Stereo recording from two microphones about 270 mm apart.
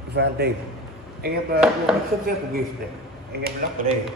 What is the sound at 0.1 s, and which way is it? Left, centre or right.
A man's voice, right.